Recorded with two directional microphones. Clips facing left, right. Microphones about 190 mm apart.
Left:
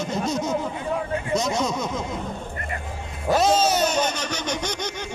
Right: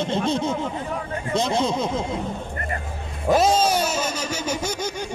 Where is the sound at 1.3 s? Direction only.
30° right (ahead or behind).